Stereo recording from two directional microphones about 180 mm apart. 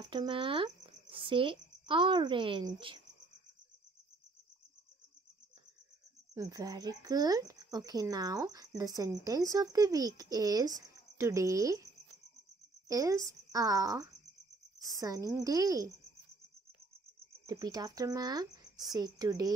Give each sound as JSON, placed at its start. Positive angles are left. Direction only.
{"t": 0.1, "sound": "a woman's voice", "side_deg": -25}
{"t": 6.3, "sound": "speech", "side_deg": -20}
{"t": 17.5, "sound": "speech", "side_deg": -20}